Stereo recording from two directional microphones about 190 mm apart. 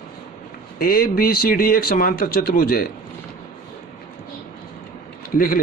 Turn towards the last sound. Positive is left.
turn(degrees=45)  # may be behind; listen again after turning